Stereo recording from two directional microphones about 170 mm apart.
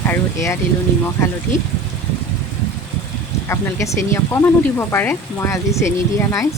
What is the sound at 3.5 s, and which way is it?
Speech, 15° left (ahead or behind).